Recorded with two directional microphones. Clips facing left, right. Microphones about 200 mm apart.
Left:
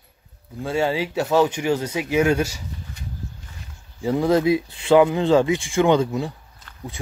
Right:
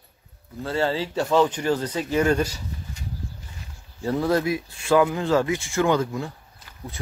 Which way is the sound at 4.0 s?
15° left (ahead or behind).